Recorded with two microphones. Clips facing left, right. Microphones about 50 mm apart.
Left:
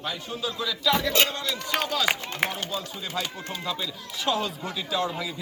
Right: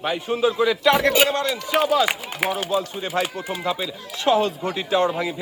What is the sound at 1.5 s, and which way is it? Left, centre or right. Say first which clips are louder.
A man's voice: right 8 dB; centre.